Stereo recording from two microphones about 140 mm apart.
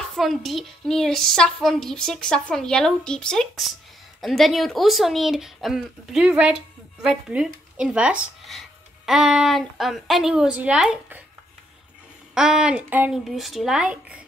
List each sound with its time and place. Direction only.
0.1 s a woman's voice: centre (ahead or behind)
12.4 s a woman's voice: 5° right (ahead or behind)